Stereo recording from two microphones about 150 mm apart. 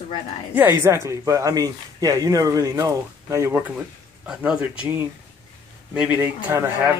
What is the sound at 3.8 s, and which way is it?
Speech, 5° right (ahead or behind).